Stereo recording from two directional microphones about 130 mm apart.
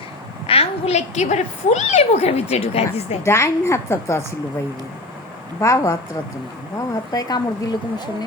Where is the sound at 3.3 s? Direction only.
20° left (ahead or behind).